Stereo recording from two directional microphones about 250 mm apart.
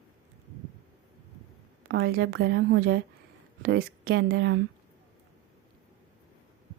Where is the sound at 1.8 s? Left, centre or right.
Right.